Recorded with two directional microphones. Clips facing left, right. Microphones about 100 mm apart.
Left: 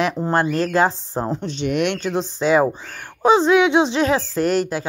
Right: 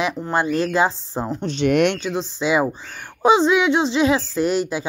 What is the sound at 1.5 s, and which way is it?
Speech, 70° right (ahead or behind).